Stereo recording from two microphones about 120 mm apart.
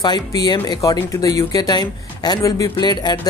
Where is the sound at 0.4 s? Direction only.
35° left (ahead or behind).